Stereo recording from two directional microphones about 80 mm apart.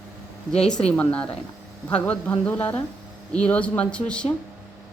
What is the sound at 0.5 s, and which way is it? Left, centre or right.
A woman's voice, centre.